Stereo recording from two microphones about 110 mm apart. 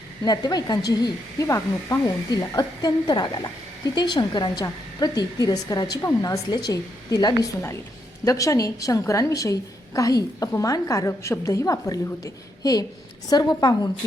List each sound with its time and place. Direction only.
0.3 s a woman's voice: 35° left (ahead or behind)